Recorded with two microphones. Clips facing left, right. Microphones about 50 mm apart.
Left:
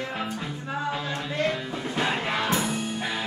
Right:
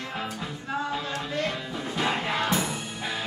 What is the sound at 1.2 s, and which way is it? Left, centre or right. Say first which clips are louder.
Music: left 2 dB; left.